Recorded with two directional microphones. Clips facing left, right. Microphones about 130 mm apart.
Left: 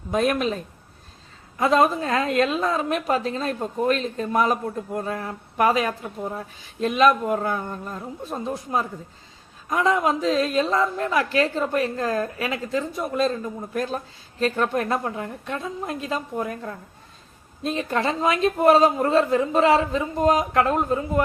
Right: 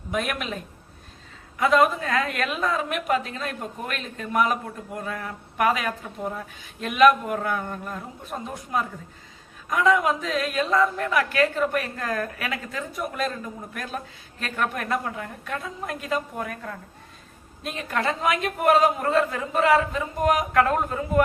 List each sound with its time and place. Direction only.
0.1 s a woman's voice: 35° left (ahead or behind)